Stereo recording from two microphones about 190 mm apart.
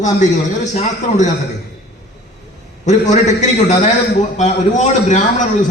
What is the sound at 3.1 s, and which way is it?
A man's voice, 35° left (ahead or behind).